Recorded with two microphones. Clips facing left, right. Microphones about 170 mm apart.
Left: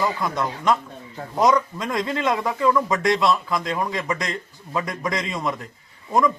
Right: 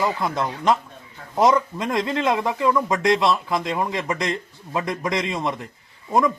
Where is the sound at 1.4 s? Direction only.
Centre (ahead or behind).